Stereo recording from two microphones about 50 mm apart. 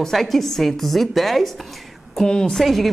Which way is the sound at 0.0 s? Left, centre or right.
Centre.